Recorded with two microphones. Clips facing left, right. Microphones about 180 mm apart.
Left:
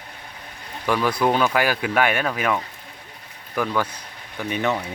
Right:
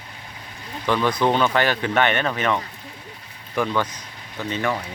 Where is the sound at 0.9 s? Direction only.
10° left (ahead or behind).